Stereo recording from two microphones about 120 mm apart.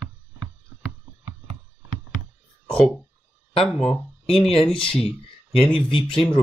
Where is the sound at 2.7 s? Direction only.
5° left (ahead or behind).